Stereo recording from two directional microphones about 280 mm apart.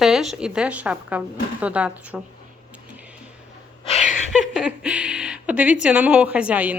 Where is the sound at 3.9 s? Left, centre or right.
Left.